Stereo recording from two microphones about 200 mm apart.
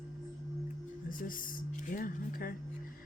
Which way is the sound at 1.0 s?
45° left (ahead or behind).